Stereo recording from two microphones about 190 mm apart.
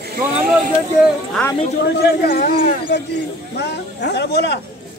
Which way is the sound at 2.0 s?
50° left (ahead or behind).